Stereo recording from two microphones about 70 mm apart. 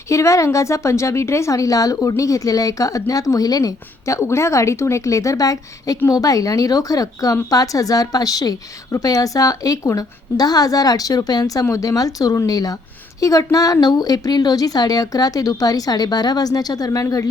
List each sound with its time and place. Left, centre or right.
0.1 s speech: left
11.7 s speech: left